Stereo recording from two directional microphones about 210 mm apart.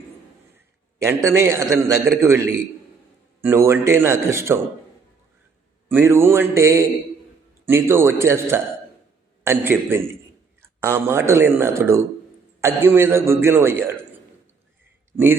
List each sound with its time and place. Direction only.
1.0 s a man's voice: 15° right (ahead or behind)
5.9 s a man's voice: 10° right (ahead or behind)